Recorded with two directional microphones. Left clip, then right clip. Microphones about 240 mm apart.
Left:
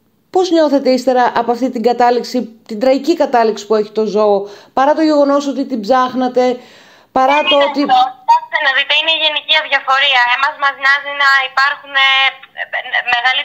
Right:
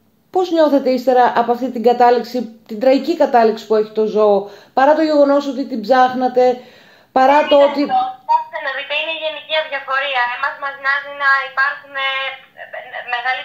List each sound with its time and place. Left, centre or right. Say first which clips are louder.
0.3 s a woman's voice: left 2 dB; left
7.4 s speech: even; left
7.9 s a sound: left 5 dB; left